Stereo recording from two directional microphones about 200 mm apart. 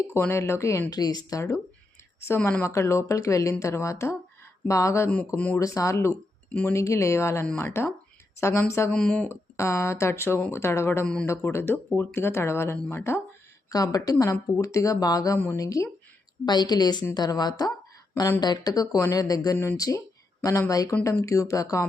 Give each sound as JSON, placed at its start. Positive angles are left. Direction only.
{"t": 0.1, "sound": "a woman's voice", "side_deg": 15}